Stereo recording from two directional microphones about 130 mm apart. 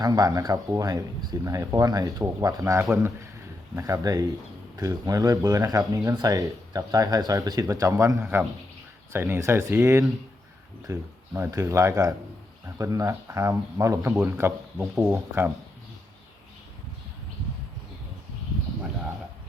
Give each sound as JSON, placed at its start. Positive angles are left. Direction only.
{"t": 0.0, "sound": "speech", "side_deg": -30}